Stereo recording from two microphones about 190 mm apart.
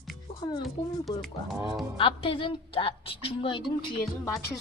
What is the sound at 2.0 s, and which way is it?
A woman's voice, 25° left (ahead or behind).